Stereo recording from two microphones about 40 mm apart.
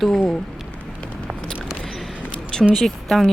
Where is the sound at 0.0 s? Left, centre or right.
Centre.